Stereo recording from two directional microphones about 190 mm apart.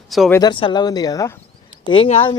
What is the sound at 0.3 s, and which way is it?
Speech, 20° left (ahead or behind).